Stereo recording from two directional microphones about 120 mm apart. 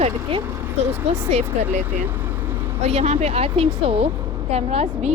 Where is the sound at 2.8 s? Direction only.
65° right (ahead or behind).